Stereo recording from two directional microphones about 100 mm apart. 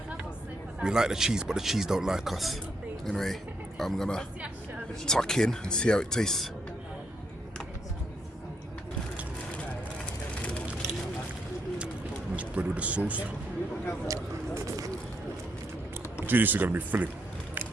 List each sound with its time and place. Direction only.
0.8 s speech: 5° right (ahead or behind)
10.4 s vehicle: 15° left (ahead or behind)
12.4 s speech: 15° right (ahead or behind)
14.1 s a sound: 30° right (ahead or behind)
16.2 s speech: 20° right (ahead or behind)